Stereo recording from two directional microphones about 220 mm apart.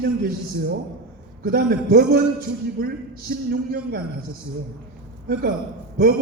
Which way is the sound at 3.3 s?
45° right (ahead or behind).